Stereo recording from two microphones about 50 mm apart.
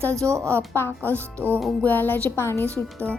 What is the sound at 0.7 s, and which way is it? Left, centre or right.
A woman's voice, left.